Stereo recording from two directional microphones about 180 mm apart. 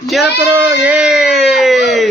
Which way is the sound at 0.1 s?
5° right (ahead or behind).